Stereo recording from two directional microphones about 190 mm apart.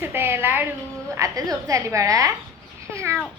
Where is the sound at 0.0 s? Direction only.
10° right (ahead or behind).